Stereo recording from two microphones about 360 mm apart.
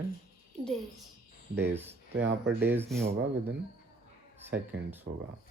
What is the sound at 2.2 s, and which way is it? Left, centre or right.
Speech, right.